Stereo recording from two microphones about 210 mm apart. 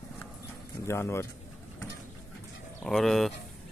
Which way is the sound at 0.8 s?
10° left (ahead or behind).